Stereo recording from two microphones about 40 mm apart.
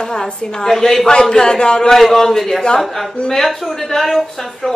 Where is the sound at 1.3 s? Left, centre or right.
Centre.